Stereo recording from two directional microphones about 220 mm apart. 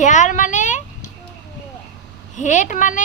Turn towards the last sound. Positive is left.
turn(degrees=35)  # may be behind; listen again after turning